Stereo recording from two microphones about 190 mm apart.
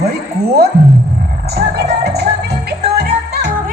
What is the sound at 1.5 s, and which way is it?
Music, 55° right (ahead or behind).